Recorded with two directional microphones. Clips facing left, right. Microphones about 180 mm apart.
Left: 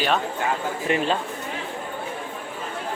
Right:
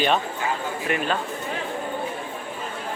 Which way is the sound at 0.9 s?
30° left (ahead or behind).